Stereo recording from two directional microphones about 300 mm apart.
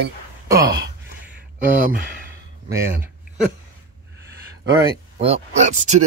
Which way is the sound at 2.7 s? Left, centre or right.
Centre.